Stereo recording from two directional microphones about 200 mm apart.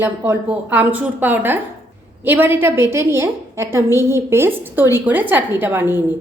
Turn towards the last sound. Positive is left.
turn(degrees=-10)  # may be behind; listen again after turning